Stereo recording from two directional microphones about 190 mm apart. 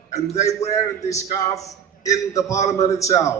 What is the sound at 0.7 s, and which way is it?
A man's voice, 15° left (ahead or behind).